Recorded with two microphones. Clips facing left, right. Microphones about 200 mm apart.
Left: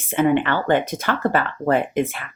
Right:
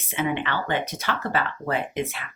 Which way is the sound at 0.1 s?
50° left (ahead or behind).